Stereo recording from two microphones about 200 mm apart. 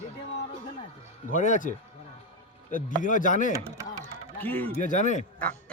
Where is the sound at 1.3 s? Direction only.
40° left (ahead or behind).